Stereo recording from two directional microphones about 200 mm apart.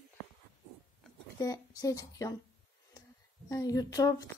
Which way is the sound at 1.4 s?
15° left (ahead or behind).